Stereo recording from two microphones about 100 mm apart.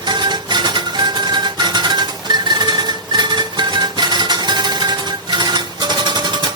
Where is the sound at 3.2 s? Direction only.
45° right (ahead or behind).